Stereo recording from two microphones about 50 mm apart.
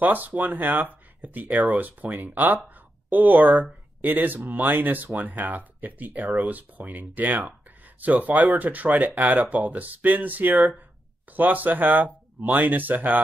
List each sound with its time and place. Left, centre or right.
0.0 s speech: right